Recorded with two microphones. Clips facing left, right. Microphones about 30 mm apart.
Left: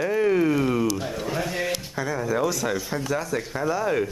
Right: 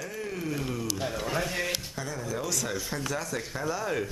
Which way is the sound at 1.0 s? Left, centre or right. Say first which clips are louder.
Left 2 dB; centre.